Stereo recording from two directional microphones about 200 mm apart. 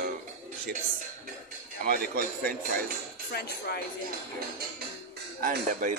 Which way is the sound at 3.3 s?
55° left (ahead or behind).